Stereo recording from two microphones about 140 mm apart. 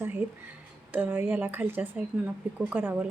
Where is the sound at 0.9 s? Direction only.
15° right (ahead or behind).